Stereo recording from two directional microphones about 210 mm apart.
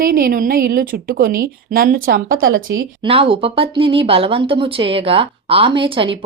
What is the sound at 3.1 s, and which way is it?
Speech, 25° right (ahead or behind).